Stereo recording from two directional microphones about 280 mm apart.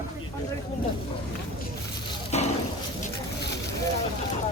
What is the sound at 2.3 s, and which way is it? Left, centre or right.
Boat, left.